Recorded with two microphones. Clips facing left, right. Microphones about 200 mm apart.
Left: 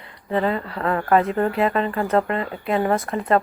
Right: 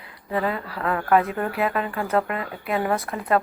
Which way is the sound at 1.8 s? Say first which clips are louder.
Left 3 dB; 5° right (ahead or behind).